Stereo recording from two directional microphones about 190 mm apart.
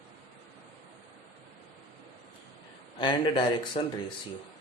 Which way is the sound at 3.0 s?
25° left (ahead or behind).